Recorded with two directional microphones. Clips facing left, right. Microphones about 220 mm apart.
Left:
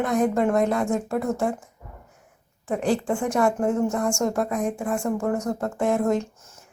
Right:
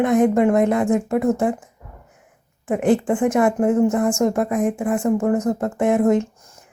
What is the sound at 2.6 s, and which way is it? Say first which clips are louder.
A woman's voice: right 6 dB; 20° right (ahead or behind).